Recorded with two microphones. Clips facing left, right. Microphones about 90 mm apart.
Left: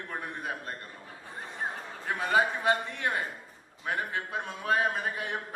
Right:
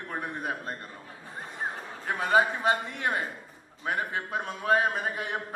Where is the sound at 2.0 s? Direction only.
20° right (ahead or behind).